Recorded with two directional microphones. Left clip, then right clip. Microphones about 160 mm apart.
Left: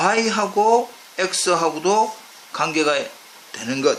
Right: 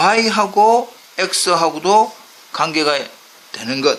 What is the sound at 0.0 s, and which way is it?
Speech, 35° right (ahead or behind).